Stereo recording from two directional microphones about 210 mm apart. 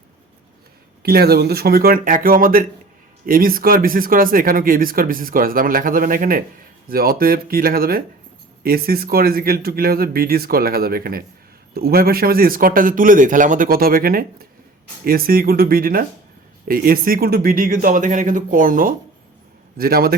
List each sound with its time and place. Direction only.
1.0 s speech: 50° right (ahead or behind)